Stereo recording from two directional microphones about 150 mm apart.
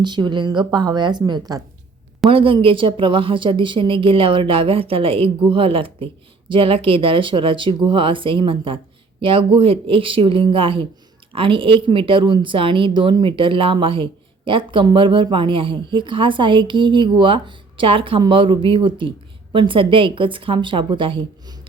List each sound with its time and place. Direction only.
0.0 s a woman's voice: 30° right (ahead or behind)
2.3 s a woman's voice: 35° right (ahead or behind)